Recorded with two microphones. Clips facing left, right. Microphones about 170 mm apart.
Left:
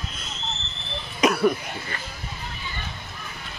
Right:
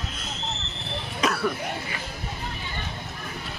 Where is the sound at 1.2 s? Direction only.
15° left (ahead or behind).